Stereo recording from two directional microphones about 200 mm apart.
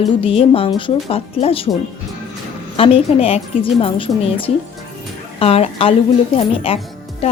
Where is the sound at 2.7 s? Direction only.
30° left (ahead or behind).